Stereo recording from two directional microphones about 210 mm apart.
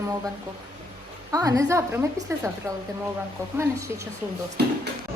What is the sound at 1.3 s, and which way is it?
Speech, 15° right (ahead or behind).